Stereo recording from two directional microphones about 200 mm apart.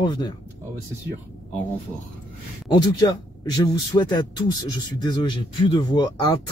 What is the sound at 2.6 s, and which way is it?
Speech, 20° left (ahead or behind).